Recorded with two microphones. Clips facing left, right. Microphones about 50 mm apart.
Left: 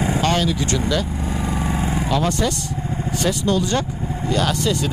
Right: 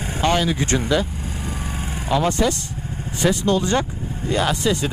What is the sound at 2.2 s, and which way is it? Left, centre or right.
Speech, right.